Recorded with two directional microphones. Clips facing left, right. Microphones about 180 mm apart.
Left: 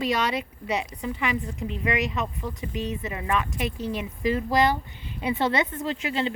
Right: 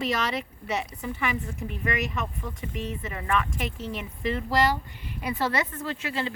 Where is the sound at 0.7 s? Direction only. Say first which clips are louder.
Left 2 dB; 15° left (ahead or behind).